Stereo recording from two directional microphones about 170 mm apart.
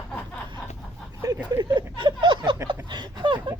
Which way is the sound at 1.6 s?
25° right (ahead or behind).